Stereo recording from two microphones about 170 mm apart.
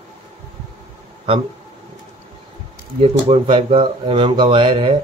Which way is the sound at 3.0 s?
35° right (ahead or behind).